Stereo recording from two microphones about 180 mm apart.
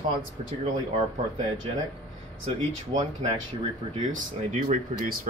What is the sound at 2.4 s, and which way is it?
Speech, 35° right (ahead or behind).